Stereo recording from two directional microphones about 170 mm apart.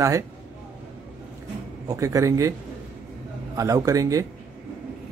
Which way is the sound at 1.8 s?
20° right (ahead or behind).